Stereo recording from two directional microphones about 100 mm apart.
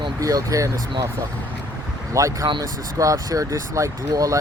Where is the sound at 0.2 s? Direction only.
35° right (ahead or behind).